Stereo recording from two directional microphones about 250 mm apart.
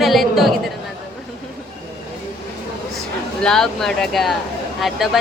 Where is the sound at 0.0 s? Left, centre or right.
Centre.